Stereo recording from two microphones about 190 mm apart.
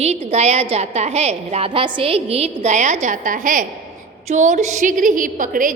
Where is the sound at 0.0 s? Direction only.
35° right (ahead or behind).